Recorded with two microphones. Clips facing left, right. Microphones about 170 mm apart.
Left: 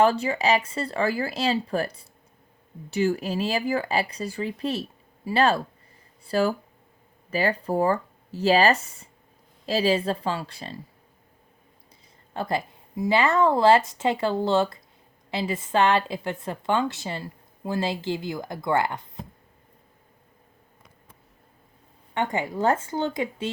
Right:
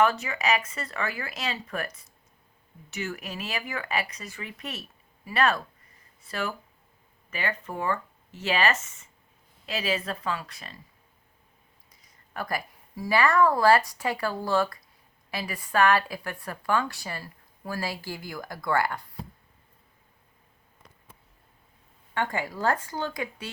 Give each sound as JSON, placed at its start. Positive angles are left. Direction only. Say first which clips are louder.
{"t": 0.0, "sound": "a woman's voice", "louder": "left 4 dB", "side_deg": 30}
{"t": 12.3, "sound": "a woman's voice", "louder": "left 5 dB", "side_deg": 25}
{"t": 22.1, "sound": "a woman's voice", "louder": "left 3 dB", "side_deg": 20}